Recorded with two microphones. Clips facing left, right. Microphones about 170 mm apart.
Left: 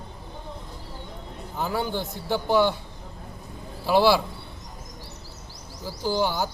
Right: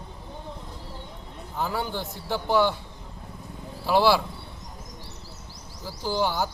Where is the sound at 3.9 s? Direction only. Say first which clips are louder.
Left 1 dB; 10° left (ahead or behind).